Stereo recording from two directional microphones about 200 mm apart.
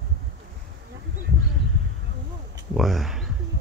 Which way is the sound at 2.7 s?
Centre (ahead or behind).